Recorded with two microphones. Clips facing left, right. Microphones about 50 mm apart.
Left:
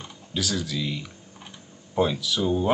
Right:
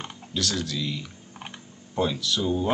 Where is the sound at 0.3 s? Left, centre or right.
Centre.